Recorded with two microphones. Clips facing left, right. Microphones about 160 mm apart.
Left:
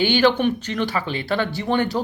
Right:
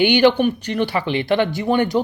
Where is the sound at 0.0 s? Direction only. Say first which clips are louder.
Right 3 dB; 15° right (ahead or behind).